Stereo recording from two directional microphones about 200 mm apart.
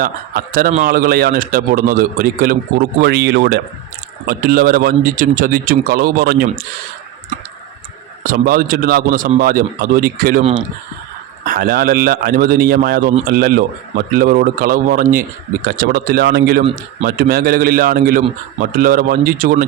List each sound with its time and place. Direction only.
0.0 s a man's voice: 45° right (ahead or behind)
8.2 s a man's voice: 45° right (ahead or behind)
11.4 s a man's voice: 45° right (ahead or behind)